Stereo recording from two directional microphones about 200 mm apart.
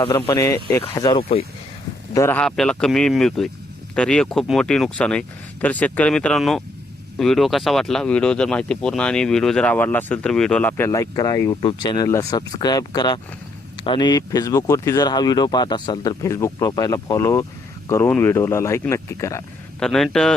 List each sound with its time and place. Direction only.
0.0 s speech: 20° left (ahead or behind)
19.8 s speech: centre (ahead or behind)